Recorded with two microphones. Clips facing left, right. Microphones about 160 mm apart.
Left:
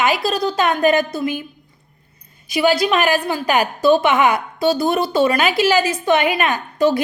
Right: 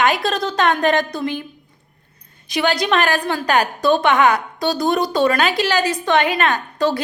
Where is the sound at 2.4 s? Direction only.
5° left (ahead or behind).